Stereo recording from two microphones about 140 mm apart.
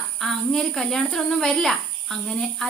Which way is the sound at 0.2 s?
Centre (ahead or behind).